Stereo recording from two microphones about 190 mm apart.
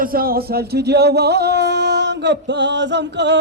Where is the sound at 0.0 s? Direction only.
50° right (ahead or behind).